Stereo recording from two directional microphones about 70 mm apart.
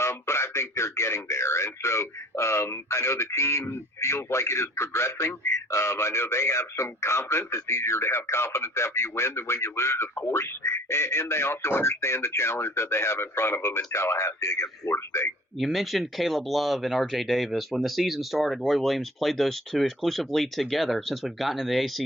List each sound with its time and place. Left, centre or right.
0.0 s a sound: left
5.7 s a man's voice: left
15.5 s speech: centre